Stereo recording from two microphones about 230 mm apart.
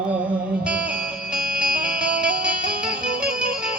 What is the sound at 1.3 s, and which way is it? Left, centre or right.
Music, centre.